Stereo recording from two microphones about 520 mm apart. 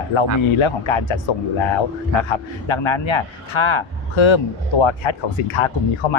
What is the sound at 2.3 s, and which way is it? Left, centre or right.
Speech, left.